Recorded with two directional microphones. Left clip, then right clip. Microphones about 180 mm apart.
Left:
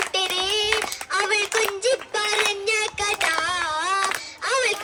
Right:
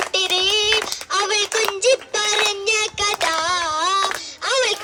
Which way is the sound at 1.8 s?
60° right (ahead or behind).